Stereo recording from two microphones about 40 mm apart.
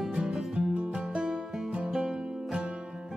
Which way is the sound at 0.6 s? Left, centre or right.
Right.